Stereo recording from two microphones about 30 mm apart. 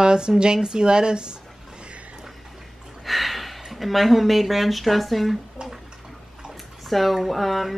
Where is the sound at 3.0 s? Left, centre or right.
Centre.